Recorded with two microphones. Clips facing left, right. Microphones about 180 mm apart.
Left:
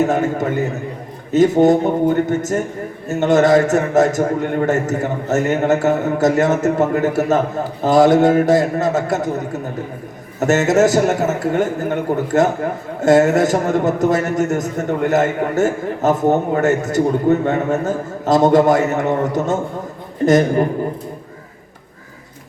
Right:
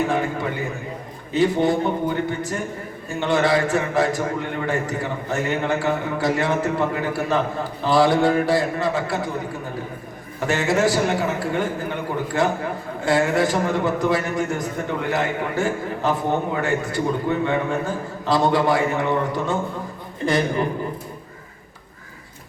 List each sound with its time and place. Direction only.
0.0 s a man's voice: 45° left (ahead or behind)